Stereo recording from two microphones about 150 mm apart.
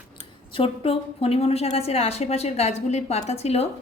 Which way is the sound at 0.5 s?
40° left (ahead or behind).